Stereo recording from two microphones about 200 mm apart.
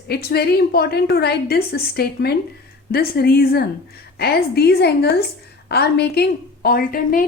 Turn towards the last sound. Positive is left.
turn(degrees=45)  # may be behind; listen again after turning